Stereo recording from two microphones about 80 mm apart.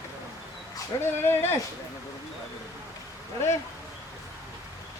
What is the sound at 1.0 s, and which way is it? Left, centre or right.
Speech, left.